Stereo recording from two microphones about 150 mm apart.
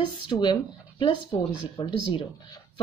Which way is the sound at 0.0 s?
30° left (ahead or behind).